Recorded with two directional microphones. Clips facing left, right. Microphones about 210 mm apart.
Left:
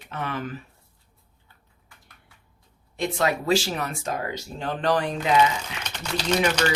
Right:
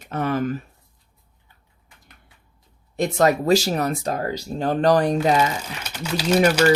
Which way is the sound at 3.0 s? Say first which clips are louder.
Right 6 dB; 45° right (ahead or behind).